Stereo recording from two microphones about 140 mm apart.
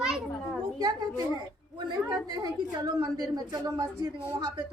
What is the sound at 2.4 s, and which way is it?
A woman's voice, 25° right (ahead or behind).